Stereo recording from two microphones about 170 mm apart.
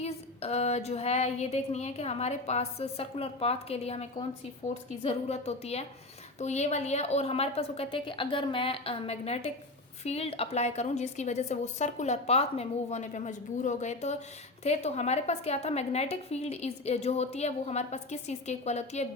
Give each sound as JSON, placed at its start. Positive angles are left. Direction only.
{"t": 0.0, "sound": "a woman's voice", "side_deg": 35}